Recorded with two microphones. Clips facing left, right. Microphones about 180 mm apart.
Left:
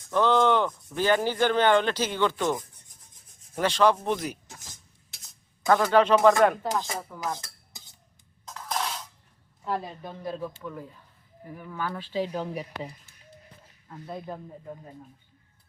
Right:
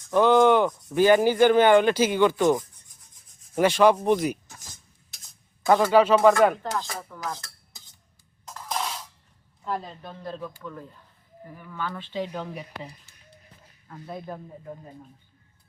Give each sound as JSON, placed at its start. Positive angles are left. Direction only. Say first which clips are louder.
{"t": 0.1, "sound": "speech", "louder": "right 4 dB", "side_deg": -10}
{"t": 5.6, "sound": "speech", "louder": "right 2 dB", "side_deg": -15}
{"t": 6.6, "sound": "speech", "louder": "left 1 dB", "side_deg": 15}
{"t": 7.3, "sound": "stir", "louder": "left 2 dB", "side_deg": 20}
{"t": 8.4, "sound": "music", "louder": "even", "side_deg": 0}
{"t": 9.6, "sound": "speech", "louder": "even", "side_deg": 10}